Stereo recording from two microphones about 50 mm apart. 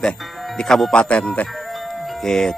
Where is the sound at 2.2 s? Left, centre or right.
Centre.